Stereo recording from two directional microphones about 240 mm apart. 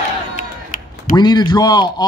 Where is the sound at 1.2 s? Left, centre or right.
Centre.